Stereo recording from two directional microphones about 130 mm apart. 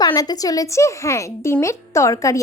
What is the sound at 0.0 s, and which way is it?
A woman's voice, 30° left (ahead or behind).